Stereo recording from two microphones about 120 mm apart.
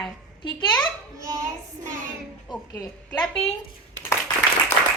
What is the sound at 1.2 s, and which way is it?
Speech, 25° right (ahead or behind).